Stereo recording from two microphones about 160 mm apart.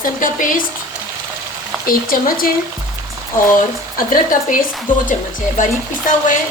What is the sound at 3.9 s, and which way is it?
Speech, 60° left (ahead or behind).